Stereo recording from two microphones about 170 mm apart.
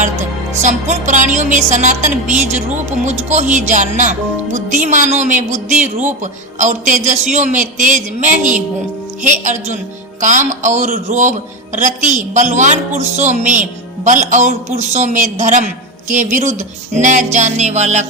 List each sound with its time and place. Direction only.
0.6 s speech: 45° right (ahead or behind)
6.6 s speech: 45° right (ahead or behind)